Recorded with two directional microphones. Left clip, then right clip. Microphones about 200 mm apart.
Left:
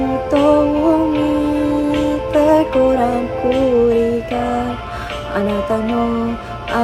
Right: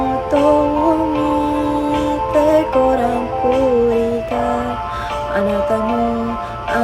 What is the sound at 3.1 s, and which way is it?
Music, 15° right (ahead or behind).